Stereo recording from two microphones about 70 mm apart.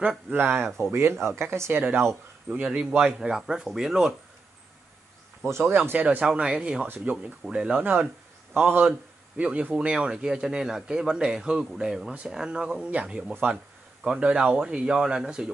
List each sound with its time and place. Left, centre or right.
0.3 s speech: right
2.5 s speech: centre
5.7 s speech: right
6.0 s speech: centre
7.8 s speech: right
9.4 s speech: centre